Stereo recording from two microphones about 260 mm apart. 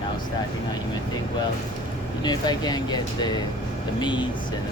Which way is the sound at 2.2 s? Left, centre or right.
Centre.